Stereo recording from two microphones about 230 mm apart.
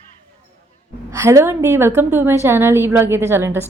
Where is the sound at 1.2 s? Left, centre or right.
Centre.